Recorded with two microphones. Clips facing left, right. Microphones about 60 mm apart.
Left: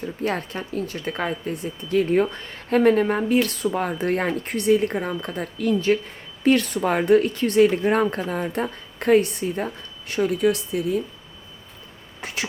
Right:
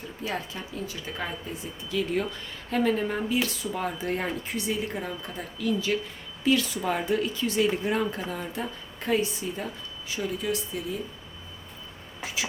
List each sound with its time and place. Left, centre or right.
0.2 s speech: left
2.0 s speech: left
12.2 s vehicle: left